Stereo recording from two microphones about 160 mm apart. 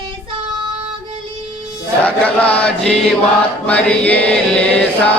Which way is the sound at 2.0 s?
10° left (ahead or behind).